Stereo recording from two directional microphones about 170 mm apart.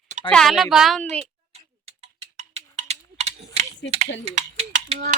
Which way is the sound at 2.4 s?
40° right (ahead or behind).